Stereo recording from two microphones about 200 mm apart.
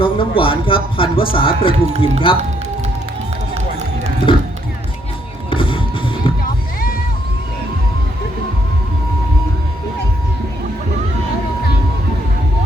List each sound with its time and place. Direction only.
0.0 s speech: 25° left (ahead or behind)
4.3 s speech: 25° left (ahead or behind)
5.5 s music: 25° left (ahead or behind)